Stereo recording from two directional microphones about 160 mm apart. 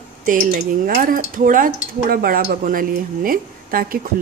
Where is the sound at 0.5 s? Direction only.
70° right (ahead or behind).